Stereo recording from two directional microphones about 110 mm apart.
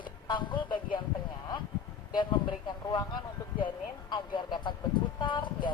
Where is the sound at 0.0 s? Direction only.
45° left (ahead or behind).